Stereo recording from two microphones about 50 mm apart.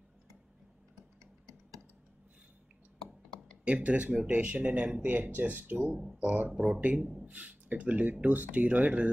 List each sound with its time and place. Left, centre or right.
3.6 s speech: right
5.1 s speech: right
6.5 s speech: right